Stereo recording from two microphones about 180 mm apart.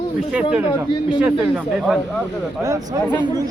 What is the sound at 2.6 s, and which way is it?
Speech, 20° right (ahead or behind).